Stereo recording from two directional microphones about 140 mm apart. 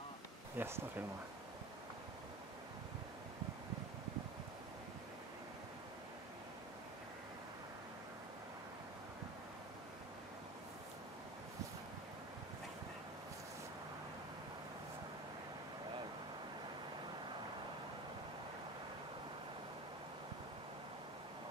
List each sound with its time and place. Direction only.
0.6 s speech: 15° right (ahead or behind)